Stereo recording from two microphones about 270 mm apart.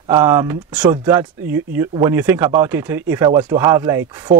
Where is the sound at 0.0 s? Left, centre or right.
Centre.